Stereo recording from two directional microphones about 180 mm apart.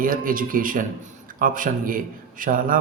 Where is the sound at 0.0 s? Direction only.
50° right (ahead or behind).